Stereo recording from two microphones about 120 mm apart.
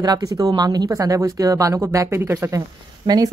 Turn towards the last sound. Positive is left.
turn(degrees=-35)  # may be behind; listen again after turning